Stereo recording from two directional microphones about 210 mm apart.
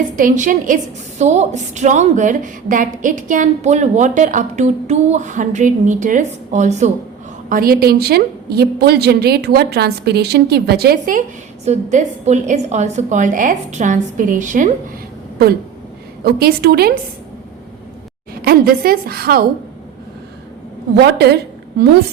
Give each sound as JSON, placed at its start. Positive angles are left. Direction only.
{"t": 0.2, "sound": "a woman's voice", "side_deg": -35}
{"t": 7.5, "sound": "a woman's voice", "side_deg": -45}
{"t": 11.6, "sound": "a woman's voice", "side_deg": -35}
{"t": 16.2, "sound": "a woman's voice", "side_deg": -45}
{"t": 18.4, "sound": "a woman's voice", "side_deg": -45}
{"t": 20.9, "sound": "a woman's voice", "side_deg": -50}